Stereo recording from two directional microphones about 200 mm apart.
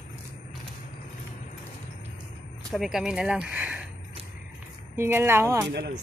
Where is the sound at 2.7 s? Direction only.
Centre (ahead or behind).